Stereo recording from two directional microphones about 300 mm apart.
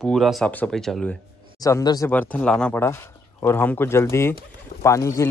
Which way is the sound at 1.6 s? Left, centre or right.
Centre.